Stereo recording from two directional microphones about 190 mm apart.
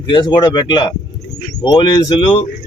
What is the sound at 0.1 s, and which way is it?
A man's voice, 25° left (ahead or behind).